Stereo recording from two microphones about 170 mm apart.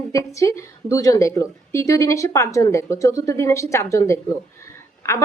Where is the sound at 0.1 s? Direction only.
20° left (ahead or behind).